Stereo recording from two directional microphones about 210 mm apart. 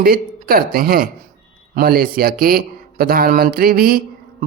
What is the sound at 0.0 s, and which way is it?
Speech, 45° right (ahead or behind).